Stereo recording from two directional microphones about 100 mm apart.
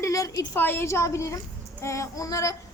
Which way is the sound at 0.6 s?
20° left (ahead or behind).